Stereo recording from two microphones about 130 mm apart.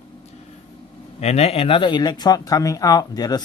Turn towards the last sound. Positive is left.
turn(degrees=30)  # may be behind; listen again after turning